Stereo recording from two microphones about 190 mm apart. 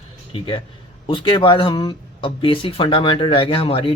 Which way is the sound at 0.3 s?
25° left (ahead or behind).